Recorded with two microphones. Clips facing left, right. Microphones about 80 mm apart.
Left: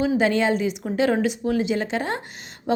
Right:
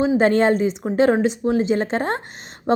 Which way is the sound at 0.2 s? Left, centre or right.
Right.